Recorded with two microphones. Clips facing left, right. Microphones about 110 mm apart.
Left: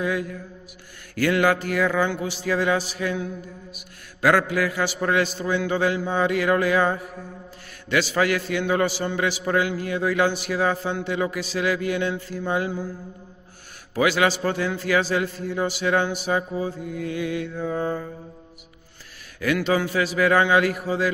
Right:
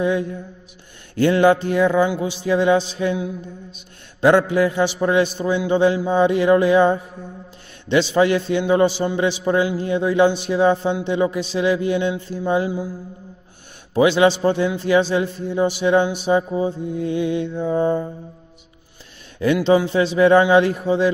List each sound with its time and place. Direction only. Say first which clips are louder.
0.0 s a man's voice: right 5 dB; 25° right (ahead or behind)
13.9 s a man's voice: right 6 dB; 20° right (ahead or behind)
19.4 s a man's voice: right 6 dB; 25° right (ahead or behind)